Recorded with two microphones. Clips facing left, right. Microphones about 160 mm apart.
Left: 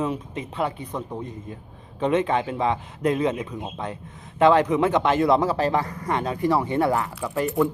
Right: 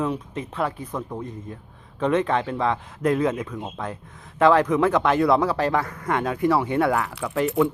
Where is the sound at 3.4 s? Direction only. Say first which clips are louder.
Even; 15° left (ahead or behind); by 5.8 s centre (ahead or behind).